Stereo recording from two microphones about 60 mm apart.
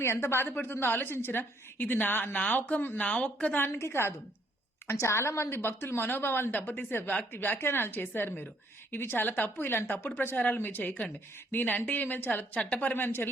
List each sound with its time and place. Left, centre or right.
0.0 s a woman's voice: left
3.5 s a woman's voice: left